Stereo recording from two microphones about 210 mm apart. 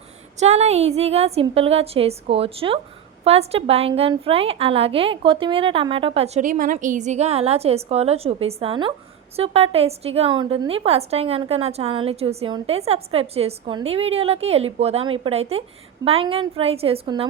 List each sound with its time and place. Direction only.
0.3 s a woman's voice: 30° right (ahead or behind)